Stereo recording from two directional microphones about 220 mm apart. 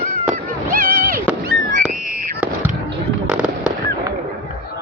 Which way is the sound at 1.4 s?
40° right (ahead or behind).